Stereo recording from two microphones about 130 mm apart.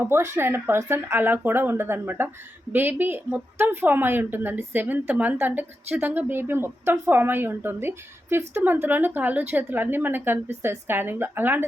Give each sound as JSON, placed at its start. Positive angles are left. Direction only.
{"t": 0.0, "sound": "a woman's voice", "side_deg": -20}